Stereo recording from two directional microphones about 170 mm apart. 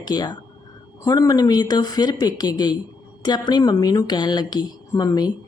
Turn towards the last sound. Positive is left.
turn(degrees=20)  # may be behind; listen again after turning